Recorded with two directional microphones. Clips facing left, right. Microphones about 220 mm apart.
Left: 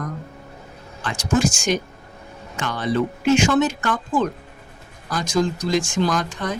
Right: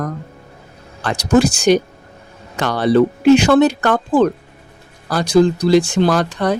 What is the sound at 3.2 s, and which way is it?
Speech, 35° right (ahead or behind).